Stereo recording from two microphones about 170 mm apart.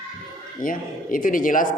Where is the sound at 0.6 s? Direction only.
55° left (ahead or behind).